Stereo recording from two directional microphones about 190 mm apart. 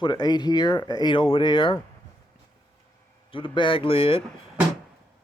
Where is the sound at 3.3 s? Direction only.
25° left (ahead or behind).